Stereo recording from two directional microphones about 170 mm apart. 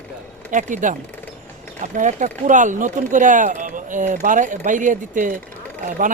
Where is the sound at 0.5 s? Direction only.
50° right (ahead or behind).